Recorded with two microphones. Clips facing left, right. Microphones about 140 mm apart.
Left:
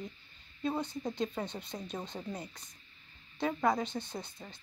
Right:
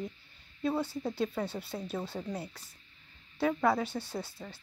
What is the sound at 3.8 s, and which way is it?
Speech, 10° right (ahead or behind).